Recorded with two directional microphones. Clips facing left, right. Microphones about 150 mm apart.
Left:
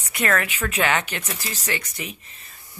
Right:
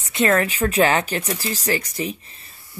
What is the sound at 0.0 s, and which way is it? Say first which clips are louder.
Speech: right 5 dB; 25° right (ahead or behind).